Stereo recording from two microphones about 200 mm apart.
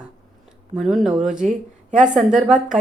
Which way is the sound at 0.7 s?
Centre (ahead or behind).